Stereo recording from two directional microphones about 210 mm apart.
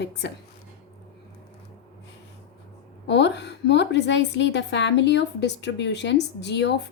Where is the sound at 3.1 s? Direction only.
55° left (ahead or behind).